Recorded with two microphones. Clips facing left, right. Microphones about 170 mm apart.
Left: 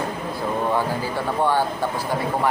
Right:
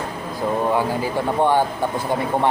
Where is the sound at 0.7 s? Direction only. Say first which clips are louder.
Right 2 dB; 15° right (ahead or behind).